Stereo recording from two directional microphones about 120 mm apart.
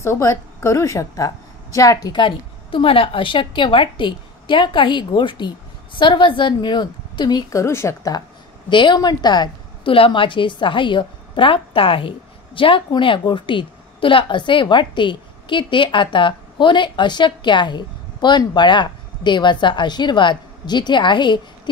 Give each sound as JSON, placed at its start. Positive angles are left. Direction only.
{"t": 0.0, "sound": "a woman's voice", "side_deg": 25}
{"t": 2.1, "sound": "a woman's voice", "side_deg": 45}
{"t": 8.6, "sound": "a woman's voice", "side_deg": 40}